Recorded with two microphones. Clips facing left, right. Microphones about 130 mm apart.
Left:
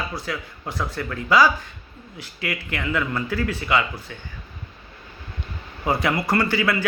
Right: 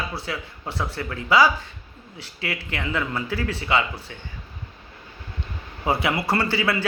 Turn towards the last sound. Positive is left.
turn(degrees=-30)  # may be behind; listen again after turning